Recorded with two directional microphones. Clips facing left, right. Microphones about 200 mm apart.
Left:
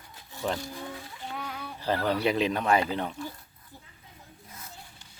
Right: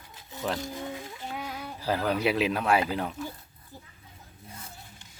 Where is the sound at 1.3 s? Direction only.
5° right (ahead or behind).